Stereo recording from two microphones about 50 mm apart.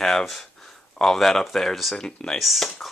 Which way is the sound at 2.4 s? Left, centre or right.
Centre.